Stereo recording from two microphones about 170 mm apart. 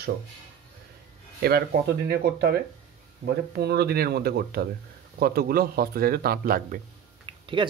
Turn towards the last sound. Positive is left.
turn(degrees=-30)  # may be behind; listen again after turning